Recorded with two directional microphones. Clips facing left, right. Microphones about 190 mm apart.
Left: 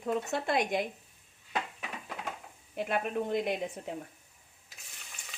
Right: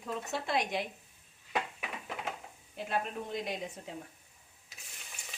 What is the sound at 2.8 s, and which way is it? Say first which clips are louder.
Speech: left 4 dB; 60° left (ahead or behind).